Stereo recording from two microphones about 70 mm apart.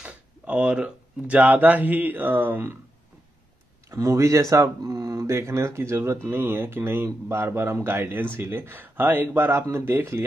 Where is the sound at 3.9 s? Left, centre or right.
Right.